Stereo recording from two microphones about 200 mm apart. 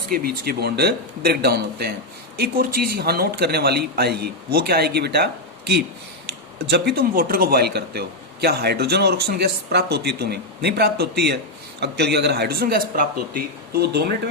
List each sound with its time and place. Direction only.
0.1 s a man's voice: 50° right (ahead or behind)